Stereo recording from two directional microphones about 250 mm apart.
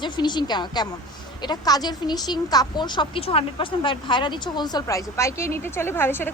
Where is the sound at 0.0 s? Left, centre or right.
Centre.